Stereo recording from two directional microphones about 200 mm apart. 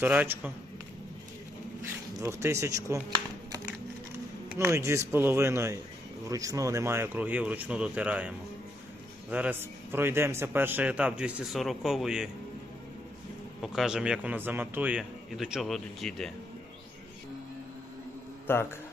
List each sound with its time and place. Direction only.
0.0 s a man's voice: 10° right (ahead or behind)
1.8 s speech: 15° right (ahead or behind)
4.4 s a man's voice: 15° right (ahead or behind)
13.6 s a man's voice: centre (ahead or behind)
18.5 s a man's voice: 10° left (ahead or behind)